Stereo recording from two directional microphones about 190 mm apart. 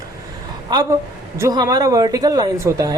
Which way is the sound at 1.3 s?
15° right (ahead or behind).